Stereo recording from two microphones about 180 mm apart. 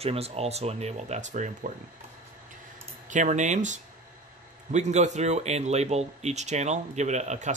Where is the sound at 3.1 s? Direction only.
45° right (ahead or behind).